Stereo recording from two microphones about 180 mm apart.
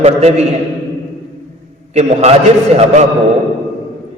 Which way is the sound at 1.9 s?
35° right (ahead or behind).